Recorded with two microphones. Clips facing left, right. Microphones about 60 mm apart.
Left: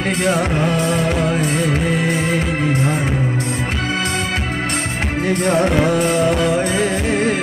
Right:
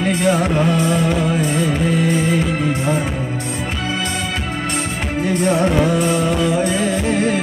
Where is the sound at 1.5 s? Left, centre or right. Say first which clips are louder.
Even; left.